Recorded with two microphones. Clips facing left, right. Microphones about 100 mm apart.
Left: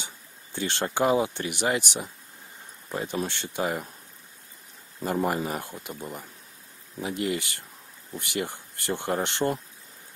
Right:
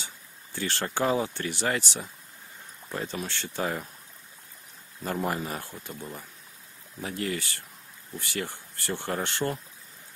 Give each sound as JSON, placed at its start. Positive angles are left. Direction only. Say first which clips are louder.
{"t": 0.0, "sound": "speech", "louder": "left 1 dB", "side_deg": 20}
{"t": 5.2, "sound": "speech", "louder": "left 2 dB", "side_deg": 10}